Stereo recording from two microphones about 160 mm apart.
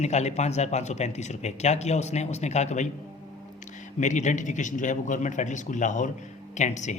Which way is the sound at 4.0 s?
50° left (ahead or behind).